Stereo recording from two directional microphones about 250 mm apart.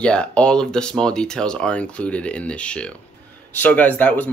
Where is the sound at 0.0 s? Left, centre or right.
Centre.